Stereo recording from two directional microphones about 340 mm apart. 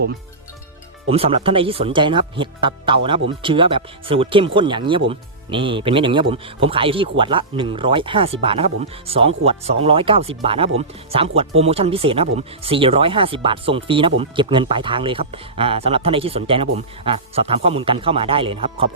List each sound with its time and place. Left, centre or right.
1.1 s speech: centre